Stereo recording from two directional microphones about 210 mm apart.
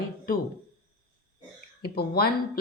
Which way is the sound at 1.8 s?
50° left (ahead or behind).